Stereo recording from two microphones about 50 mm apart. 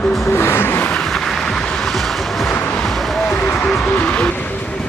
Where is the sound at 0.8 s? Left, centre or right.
Left.